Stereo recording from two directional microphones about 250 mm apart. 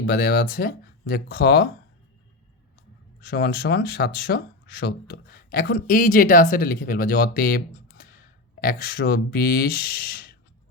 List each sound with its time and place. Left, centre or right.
0.0 s speech: left
3.2 s speech: left